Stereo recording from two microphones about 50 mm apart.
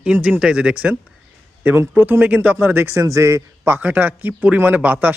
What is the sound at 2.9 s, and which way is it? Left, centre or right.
Speech, right.